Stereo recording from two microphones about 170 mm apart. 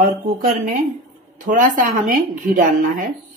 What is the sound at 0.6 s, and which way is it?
A woman's voice, 50° right (ahead or behind).